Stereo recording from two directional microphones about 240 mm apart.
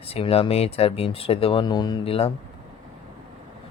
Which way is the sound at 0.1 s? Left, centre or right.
Left.